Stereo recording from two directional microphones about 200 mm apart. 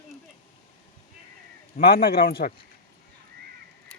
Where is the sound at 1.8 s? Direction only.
50° left (ahead or behind).